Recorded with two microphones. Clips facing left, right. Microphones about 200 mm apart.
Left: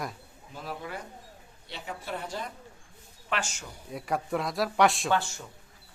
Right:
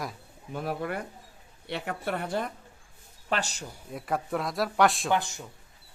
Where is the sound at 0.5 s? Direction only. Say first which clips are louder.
Right 6 dB; 60° right (ahead or behind).